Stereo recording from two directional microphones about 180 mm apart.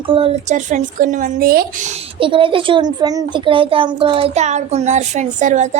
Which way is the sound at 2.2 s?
30° right (ahead or behind).